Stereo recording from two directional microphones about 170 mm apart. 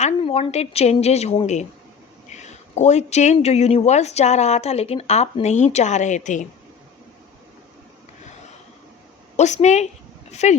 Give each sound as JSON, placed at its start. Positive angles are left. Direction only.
{"t": 0.0, "sound": "speech", "side_deg": 35}
{"t": 9.3, "sound": "speech", "side_deg": 40}